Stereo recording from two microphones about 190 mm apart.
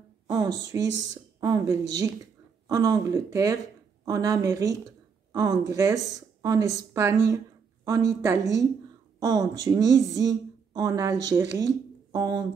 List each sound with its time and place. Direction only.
0.3 s a woman's voice: 20° right (ahead or behind)